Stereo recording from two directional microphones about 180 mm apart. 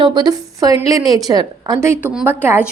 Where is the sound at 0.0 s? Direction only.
25° right (ahead or behind).